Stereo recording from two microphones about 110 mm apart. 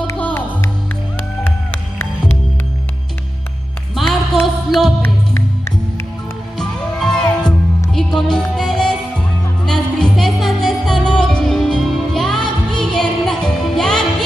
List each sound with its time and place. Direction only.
0.2 s music: 20° left (ahead or behind)
3.9 s music: centre (ahead or behind)
6.6 s music: 5° left (ahead or behind)